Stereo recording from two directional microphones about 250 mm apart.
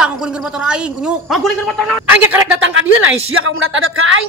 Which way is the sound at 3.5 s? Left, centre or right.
Right.